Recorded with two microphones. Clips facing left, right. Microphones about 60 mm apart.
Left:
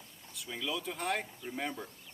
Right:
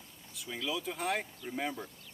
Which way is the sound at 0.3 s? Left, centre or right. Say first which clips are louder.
Right 1 dB; centre.